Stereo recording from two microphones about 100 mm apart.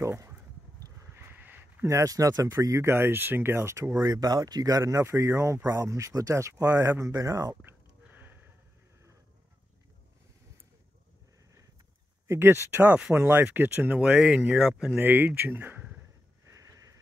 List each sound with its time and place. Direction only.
0.0 s a sound: 30° right (ahead or behind)
1.1 s speech: 20° right (ahead or behind)
4.0 s speech: 40° right (ahead or behind)
7.6 s sniff: 20° right (ahead or behind)
12.3 s speech: 25° right (ahead or behind)
13.9 s speech: 5° right (ahead or behind)
15.0 s speech: 20° right (ahead or behind)
16.4 s a sound: 30° right (ahead or behind)